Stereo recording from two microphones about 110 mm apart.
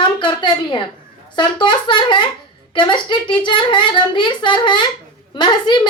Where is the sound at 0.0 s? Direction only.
45° left (ahead or behind).